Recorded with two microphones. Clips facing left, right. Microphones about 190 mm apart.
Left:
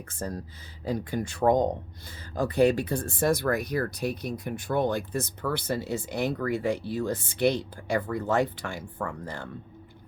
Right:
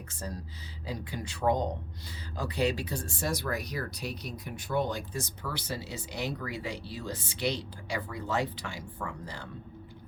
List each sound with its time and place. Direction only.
0.1 s speech: 50° left (ahead or behind)